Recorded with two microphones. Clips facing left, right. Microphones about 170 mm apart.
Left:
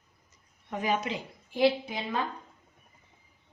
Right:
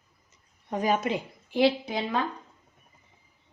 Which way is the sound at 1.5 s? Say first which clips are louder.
Right 2 dB; 75° right (ahead or behind).